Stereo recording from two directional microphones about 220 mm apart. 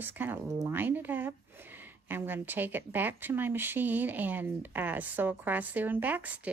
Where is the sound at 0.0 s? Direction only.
10° right (ahead or behind).